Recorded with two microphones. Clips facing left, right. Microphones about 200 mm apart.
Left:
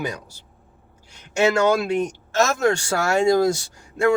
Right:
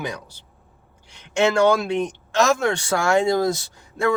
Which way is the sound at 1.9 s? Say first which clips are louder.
Left 1 dB; 10° left (ahead or behind).